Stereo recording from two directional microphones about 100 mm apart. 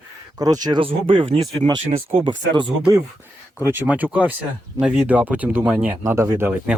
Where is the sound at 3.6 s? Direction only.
20° right (ahead or behind).